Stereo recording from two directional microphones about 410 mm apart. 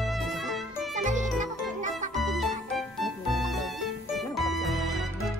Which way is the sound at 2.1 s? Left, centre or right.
Centre.